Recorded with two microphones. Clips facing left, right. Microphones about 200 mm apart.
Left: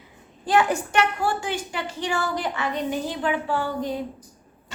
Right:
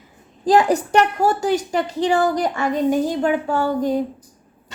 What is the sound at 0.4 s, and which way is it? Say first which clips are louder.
A woman's voice: right 6 dB; 35° right (ahead or behind).